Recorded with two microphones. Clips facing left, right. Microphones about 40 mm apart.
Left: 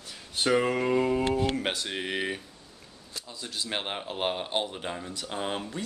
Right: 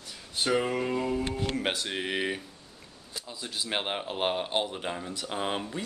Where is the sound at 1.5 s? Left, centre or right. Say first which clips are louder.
Even; centre.